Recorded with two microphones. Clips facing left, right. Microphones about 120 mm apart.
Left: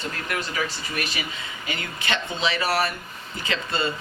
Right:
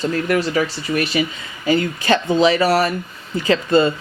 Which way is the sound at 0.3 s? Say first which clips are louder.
Right 8 dB; 40° right (ahead or behind).